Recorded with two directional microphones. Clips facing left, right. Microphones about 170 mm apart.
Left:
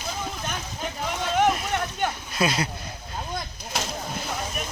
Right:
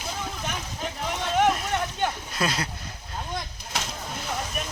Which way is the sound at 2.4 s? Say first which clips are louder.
Left 4 dB; 5° left (ahead or behind).